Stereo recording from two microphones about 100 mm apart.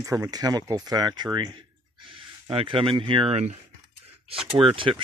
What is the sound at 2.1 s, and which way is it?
Speech, 60° right (ahead or behind).